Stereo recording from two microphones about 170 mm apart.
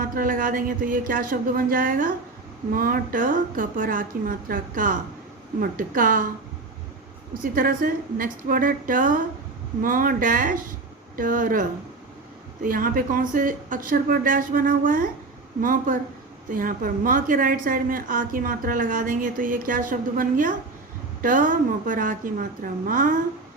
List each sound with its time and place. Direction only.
0.0 s speech: 55° right (ahead or behind)
7.4 s a woman's voice: 55° right (ahead or behind)
12.6 s a woman's voice: 55° right (ahead or behind)